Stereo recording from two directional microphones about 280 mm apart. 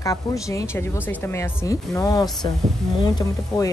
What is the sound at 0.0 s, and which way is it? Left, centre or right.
Speech, centre.